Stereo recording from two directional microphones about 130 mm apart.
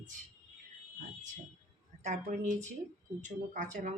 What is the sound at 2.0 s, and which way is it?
Speech, 65° right (ahead or behind).